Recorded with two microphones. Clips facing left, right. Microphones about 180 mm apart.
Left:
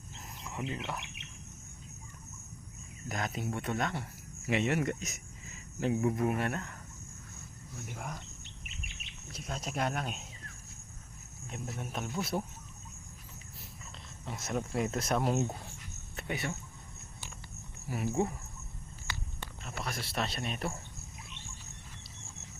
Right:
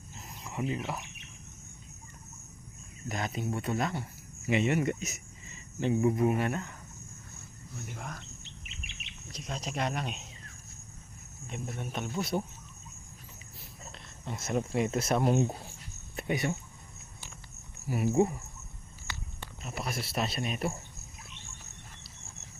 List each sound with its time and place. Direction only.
0.4 s speech: centre (ahead or behind)
3.1 s speech: centre (ahead or behind)
7.9 s speech: 10° left (ahead or behind)
9.3 s speech: 5° left (ahead or behind)
11.4 s speech: centre (ahead or behind)
14.3 s speech: centre (ahead or behind)
16.1 s speech: 15° right (ahead or behind)
17.8 s speech: 5° right (ahead or behind)
18.1 s speech: 20° right (ahead or behind)
19.6 s speech: 10° right (ahead or behind)